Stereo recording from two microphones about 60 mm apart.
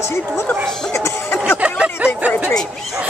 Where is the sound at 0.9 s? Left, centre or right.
Left.